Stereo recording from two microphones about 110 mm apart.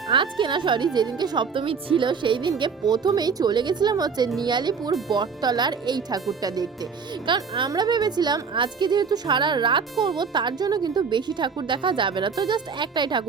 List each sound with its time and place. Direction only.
0.1 s speech: 45° right (ahead or behind)
7.3 s speech: 45° right (ahead or behind)